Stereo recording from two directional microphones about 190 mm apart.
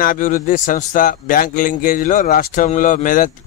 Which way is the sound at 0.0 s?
45° left (ahead or behind).